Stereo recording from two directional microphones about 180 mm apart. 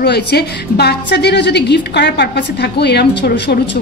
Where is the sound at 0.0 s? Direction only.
65° left (ahead or behind).